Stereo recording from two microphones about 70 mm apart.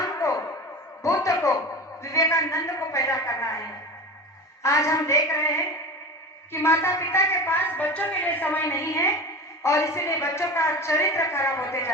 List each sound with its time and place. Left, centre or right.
0.0 s a sound: left
2.0 s a man's voice: left
4.6 s a man's voice: left
8.6 s a woman's voice: left